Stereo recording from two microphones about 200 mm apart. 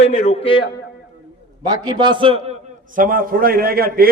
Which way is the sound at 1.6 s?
20° right (ahead or behind).